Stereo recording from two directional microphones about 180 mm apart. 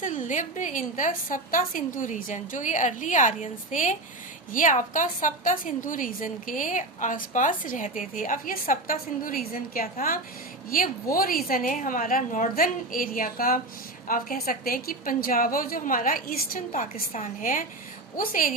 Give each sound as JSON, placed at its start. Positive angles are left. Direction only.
{"t": 0.0, "sound": "a woman's voice", "side_deg": 45}